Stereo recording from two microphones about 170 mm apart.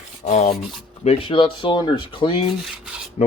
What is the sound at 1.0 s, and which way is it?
Speech, 30° left (ahead or behind).